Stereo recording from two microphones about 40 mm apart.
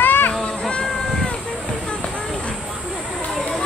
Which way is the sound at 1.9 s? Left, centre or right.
Left.